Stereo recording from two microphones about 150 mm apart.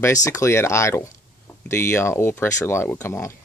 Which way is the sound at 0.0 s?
20° left (ahead or behind).